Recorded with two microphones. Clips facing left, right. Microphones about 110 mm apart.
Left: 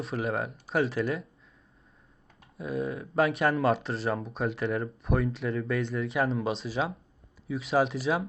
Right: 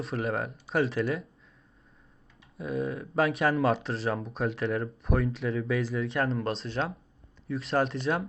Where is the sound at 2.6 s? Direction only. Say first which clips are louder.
Even; centre (ahead or behind).